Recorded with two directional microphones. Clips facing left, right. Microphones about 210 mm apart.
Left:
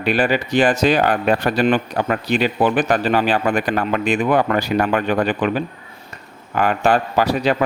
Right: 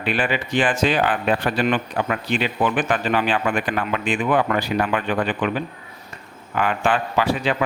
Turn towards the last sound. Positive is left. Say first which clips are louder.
# left 3 dB
turn(degrees=40)  # may be behind; listen again after turning